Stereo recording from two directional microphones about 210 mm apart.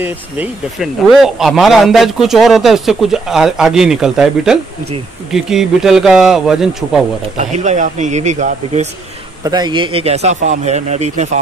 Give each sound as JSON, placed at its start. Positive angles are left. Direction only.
{"t": 0.0, "sound": "speech", "side_deg": -5}
{"t": 7.3, "sound": "speech", "side_deg": -35}
{"t": 9.4, "sound": "a man's voice", "side_deg": -20}